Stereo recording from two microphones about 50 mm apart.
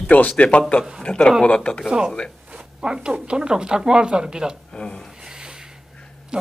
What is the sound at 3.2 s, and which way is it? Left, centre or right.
Speech, centre.